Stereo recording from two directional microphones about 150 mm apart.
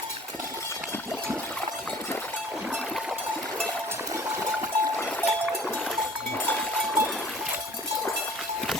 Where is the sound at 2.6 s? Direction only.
10° right (ahead or behind).